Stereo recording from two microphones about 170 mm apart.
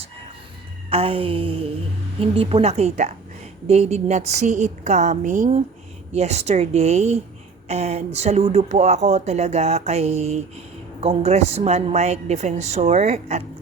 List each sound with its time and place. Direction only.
0.9 s speech: 35° right (ahead or behind)